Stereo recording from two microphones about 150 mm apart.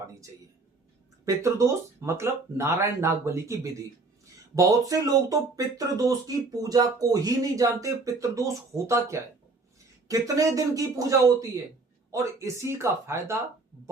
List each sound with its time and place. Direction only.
1.2 s speech: 20° right (ahead or behind)